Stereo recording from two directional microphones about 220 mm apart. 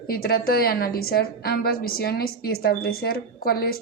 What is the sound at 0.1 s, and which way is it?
A woman's voice, 45° left (ahead or behind).